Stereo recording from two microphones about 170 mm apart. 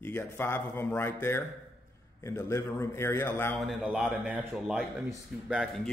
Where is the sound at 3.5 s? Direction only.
5° right (ahead or behind).